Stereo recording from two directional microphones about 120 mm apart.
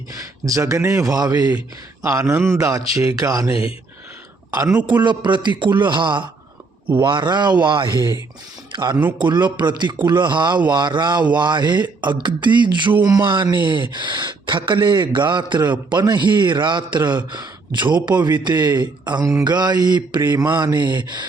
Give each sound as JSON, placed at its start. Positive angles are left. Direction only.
{"t": 0.2, "sound": "speech", "side_deg": -30}
{"t": 3.5, "sound": "speech", "side_deg": 50}
{"t": 5.0, "sound": "speech", "side_deg": -40}